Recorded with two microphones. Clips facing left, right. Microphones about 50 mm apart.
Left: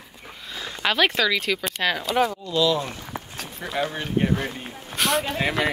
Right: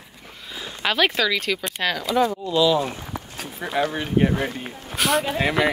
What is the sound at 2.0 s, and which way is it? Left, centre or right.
Speech, left.